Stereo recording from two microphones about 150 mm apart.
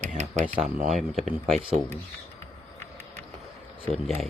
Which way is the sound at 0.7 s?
5° right (ahead or behind).